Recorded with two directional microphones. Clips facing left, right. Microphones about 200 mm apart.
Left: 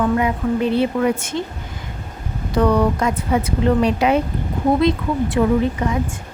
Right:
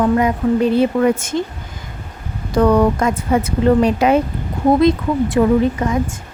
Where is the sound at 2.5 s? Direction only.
45° right (ahead or behind).